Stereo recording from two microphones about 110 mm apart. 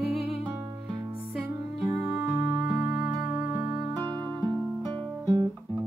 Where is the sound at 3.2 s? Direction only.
15° right (ahead or behind).